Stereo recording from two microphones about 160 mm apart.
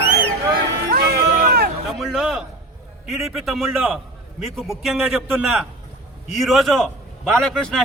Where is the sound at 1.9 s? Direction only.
Centre (ahead or behind).